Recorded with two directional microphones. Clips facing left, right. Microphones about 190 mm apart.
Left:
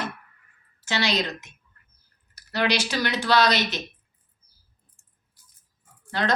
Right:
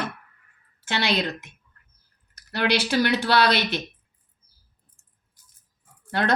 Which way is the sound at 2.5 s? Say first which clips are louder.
Right 2 dB; 55° right (ahead or behind).